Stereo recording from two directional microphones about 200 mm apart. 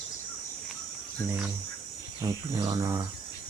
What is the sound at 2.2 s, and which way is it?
Speech, 20° right (ahead or behind).